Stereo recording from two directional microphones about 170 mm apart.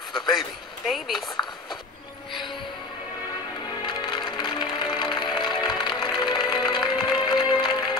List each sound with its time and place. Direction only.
0.4 s speech: centre (ahead or behind)
3.8 s music: 25° left (ahead or behind)